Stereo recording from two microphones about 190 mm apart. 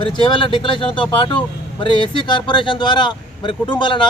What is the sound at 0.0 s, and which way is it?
Speech, 25° left (ahead or behind).